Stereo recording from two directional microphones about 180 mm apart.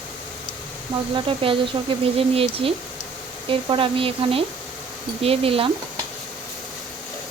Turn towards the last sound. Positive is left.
turn(degrees=-30)  # may be behind; listen again after turning